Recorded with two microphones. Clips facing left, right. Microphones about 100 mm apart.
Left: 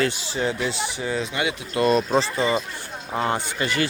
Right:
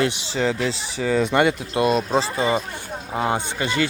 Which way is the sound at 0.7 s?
35° right (ahead or behind).